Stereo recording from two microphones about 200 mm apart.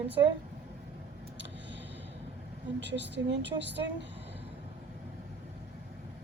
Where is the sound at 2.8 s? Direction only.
60° right (ahead or behind).